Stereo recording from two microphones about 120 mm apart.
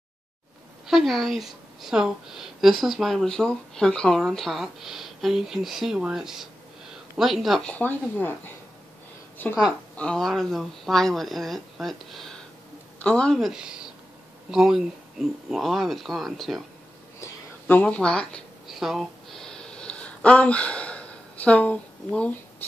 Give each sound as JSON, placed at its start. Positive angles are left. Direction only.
{"t": 0.8, "sound": "a woman's voice", "side_deg": 0}
{"t": 7.7, "sound": "speech", "side_deg": 15}
{"t": 9.4, "sound": "speech", "side_deg": 15}
{"t": 9.9, "sound": "a woman's voice", "side_deg": 5}
{"t": 17.6, "sound": "a sound", "side_deg": 10}